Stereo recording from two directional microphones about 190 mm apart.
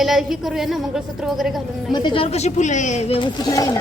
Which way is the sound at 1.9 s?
25° left (ahead or behind).